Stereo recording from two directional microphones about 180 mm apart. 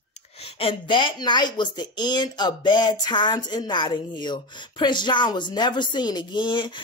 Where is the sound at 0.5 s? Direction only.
30° left (ahead or behind).